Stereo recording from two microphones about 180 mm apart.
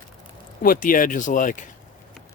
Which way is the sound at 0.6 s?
50° left (ahead or behind).